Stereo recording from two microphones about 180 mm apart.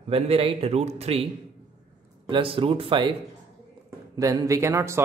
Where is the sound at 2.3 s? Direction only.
30° right (ahead or behind).